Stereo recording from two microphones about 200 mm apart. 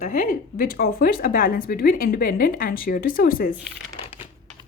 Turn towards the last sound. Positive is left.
turn(degrees=45)  # may be behind; listen again after turning